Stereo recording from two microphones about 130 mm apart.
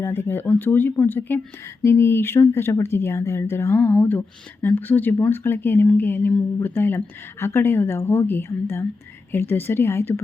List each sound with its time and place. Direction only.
0.0 s speech: 15° left (ahead or behind)